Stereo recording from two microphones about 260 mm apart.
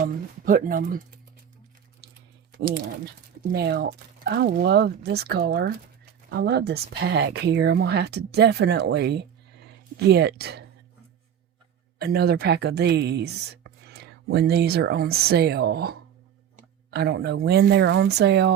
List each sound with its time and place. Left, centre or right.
0.0 s speech: right
2.0 s a sound: right
2.5 s speech: right
11.9 s speech: right
16.6 s a sound: right
17.4 s speech: right